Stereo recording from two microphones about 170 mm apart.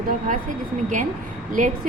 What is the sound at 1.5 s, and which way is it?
Speech, 50° right (ahead or behind).